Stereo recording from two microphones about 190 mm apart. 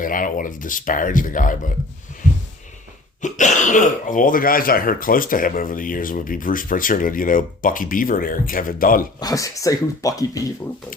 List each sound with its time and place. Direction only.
0.0 s speech: 45° left (ahead or behind)
3.2 s speech: 40° left (ahead or behind)
9.2 s speech: 15° left (ahead or behind)